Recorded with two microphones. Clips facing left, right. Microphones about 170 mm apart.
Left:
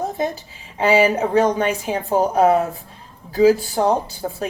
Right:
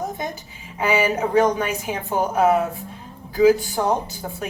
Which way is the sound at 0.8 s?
30° left (ahead or behind).